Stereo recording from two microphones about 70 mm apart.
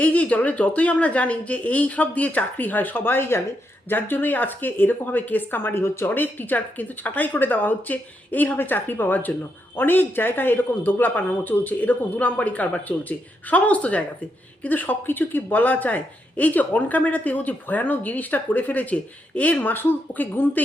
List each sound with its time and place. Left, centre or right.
0.0 s speech: left